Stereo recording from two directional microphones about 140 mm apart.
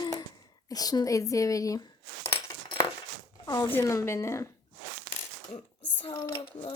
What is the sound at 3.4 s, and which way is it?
A woman's voice, 30° left (ahead or behind).